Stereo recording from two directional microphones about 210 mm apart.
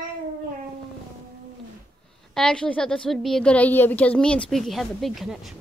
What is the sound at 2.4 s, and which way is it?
A woman's voice, 5° left (ahead or behind).